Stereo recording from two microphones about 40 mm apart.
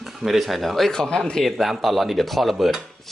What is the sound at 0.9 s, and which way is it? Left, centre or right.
Speech, centre.